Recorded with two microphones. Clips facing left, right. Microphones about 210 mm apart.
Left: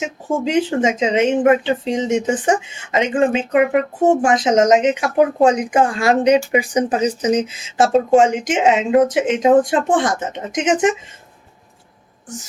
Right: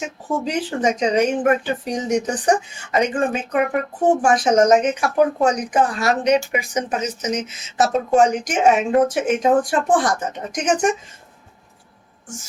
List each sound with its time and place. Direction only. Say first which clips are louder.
0.3 s speech: left 5 dB; 25° left (ahead or behind)